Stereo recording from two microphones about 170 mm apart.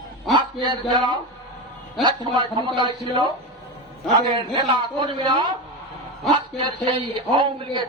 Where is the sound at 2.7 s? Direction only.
25° right (ahead or behind).